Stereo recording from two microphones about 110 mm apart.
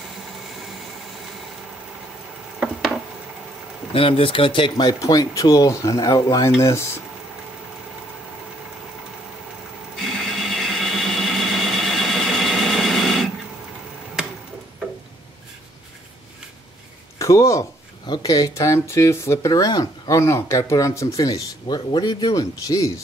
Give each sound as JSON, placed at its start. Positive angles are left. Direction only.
{"t": 3.9, "sound": "speech", "side_deg": 55}
{"t": 10.1, "sound": "a sound", "side_deg": 0}
{"t": 17.2, "sound": "speech", "side_deg": 30}
{"t": 20.2, "sound": "speech", "side_deg": 25}